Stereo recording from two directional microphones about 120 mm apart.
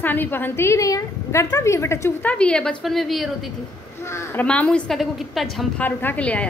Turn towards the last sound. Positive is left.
turn(degrees=10)  # may be behind; listen again after turning